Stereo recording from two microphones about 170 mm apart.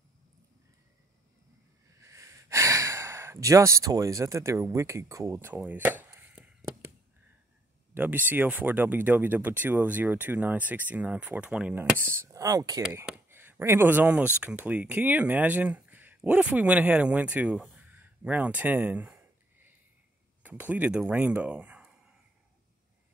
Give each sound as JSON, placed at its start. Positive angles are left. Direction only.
{"t": 2.0, "sound": "speech", "side_deg": -15}
{"t": 7.9, "sound": "speech", "side_deg": -10}
{"t": 12.1, "sound": "speech", "side_deg": -15}
{"t": 12.9, "sound": "speech", "side_deg": -10}
{"t": 20.4, "sound": "speech", "side_deg": -10}